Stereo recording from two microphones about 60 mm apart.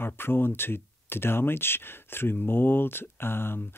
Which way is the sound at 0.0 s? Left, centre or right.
Left.